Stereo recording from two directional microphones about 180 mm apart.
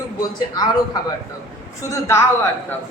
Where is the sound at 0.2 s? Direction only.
20° left (ahead or behind).